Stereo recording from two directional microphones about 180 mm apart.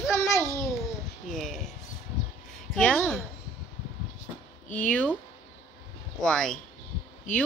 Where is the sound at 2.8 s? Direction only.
5° left (ahead or behind).